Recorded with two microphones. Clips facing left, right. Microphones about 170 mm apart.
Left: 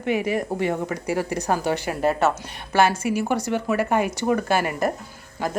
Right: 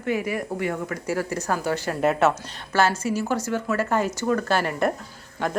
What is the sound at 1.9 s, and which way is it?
Speech, centre (ahead or behind).